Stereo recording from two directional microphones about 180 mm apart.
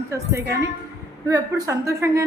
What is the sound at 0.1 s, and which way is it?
A woman's voice, 15° right (ahead or behind).